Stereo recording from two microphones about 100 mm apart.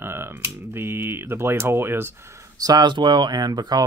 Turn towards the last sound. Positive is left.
turn(degrees=-40)  # may be behind; listen again after turning